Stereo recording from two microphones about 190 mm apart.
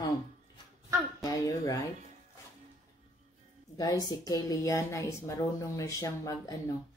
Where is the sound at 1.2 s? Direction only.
15° left (ahead or behind).